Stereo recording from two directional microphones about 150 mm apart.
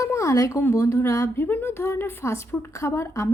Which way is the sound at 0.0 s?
20° left (ahead or behind).